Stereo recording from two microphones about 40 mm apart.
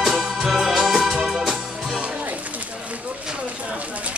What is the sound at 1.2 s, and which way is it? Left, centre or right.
Music, centre.